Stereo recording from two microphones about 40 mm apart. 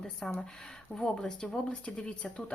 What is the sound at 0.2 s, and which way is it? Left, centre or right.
Speech, left.